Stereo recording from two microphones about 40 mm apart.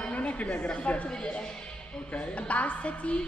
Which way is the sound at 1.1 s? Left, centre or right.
Left.